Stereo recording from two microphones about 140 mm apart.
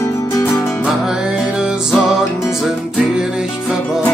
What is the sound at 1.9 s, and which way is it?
Music, centre (ahead or behind).